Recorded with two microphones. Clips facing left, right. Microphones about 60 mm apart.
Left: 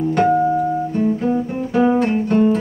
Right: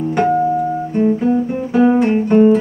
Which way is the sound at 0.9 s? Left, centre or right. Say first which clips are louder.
Right 7 dB; centre.